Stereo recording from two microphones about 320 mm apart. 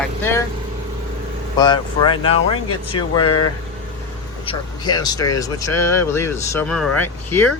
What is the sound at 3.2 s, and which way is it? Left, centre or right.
Speech, left.